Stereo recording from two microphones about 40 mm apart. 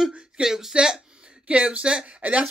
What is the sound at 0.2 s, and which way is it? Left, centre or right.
A woman's voice, centre.